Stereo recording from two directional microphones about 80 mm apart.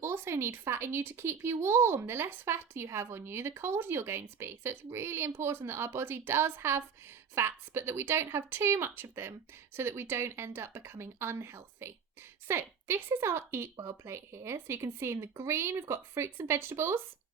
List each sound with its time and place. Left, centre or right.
0.0 s speech: right